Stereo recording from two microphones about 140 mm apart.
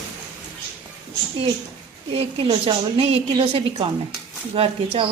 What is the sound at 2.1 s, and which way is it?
A woman's voice, 45° right (ahead or behind).